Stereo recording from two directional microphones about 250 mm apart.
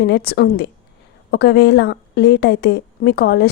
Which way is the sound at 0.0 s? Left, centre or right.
Left.